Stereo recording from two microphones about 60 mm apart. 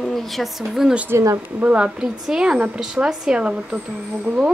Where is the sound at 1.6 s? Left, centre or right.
Centre.